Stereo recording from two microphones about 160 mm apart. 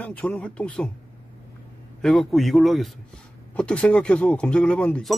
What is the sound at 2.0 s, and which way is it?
A man's voice, 5° left (ahead or behind).